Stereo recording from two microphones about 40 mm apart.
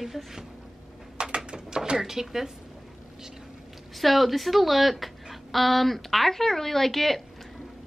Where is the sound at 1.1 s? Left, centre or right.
Right.